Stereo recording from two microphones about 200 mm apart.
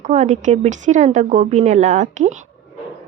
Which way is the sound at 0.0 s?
35° right (ahead or behind).